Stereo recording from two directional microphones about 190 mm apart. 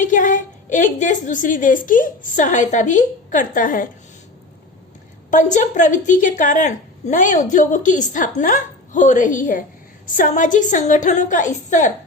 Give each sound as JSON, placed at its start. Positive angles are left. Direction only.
{"t": 0.0, "sound": "a woman's voice", "side_deg": 40}
{"t": 5.3, "sound": "a woman's voice", "side_deg": 40}